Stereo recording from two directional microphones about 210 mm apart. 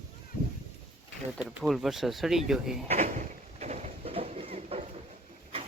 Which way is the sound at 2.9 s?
35° right (ahead or behind).